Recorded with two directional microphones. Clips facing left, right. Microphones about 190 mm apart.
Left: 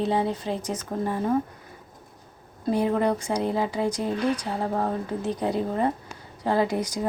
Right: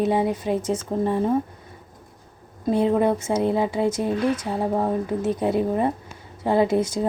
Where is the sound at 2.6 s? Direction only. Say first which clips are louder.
Right 3 dB; 20° right (ahead or behind).